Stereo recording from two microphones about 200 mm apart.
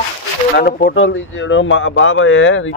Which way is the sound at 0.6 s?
50° left (ahead or behind).